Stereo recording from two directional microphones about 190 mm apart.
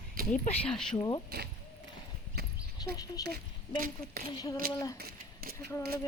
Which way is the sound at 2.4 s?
55° right (ahead or behind).